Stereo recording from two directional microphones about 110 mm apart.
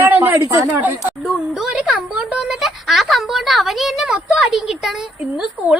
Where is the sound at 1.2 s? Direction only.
10° right (ahead or behind).